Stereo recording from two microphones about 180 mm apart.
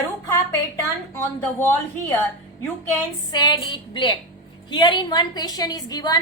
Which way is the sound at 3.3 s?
25° left (ahead or behind).